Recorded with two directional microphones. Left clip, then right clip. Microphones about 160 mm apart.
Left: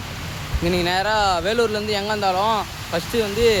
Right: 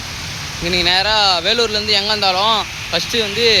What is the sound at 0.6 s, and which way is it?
Speech, 20° left (ahead or behind).